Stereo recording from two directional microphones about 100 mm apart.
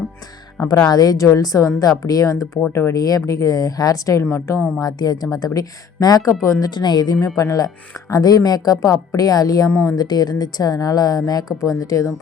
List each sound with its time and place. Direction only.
0.6 s a woman's voice: 40° left (ahead or behind)
4.2 s a woman's voice: 25° left (ahead or behind)
4.8 s a woman's voice: 40° left (ahead or behind)
9.9 s a woman's voice: 40° left (ahead or behind)